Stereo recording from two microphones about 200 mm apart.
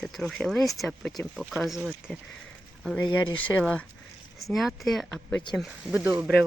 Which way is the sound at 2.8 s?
5° left (ahead or behind).